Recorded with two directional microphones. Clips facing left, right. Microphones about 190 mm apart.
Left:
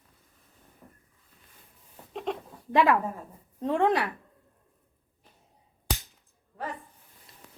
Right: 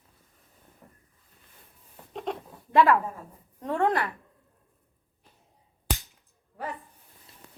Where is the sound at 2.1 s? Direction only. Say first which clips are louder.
Left 1 dB; centre (ahead or behind).